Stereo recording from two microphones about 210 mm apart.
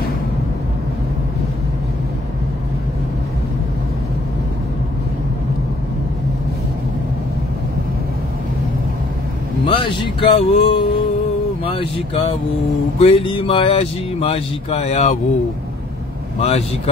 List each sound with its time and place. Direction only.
9.7 s speech: 25° left (ahead or behind)
16.3 s speech: 30° left (ahead or behind)